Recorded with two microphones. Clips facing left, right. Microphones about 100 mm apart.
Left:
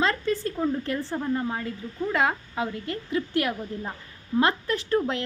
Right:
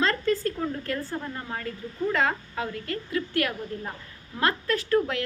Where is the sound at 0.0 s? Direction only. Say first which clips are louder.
Even; 20° left (ahead or behind).